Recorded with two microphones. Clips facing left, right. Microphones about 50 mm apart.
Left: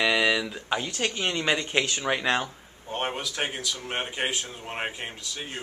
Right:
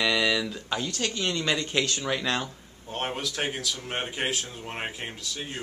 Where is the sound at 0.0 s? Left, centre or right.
Centre.